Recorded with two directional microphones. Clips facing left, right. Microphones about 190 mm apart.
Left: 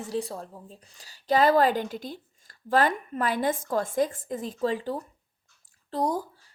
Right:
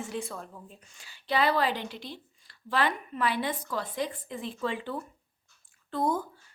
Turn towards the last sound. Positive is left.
turn(degrees=35)  # may be behind; listen again after turning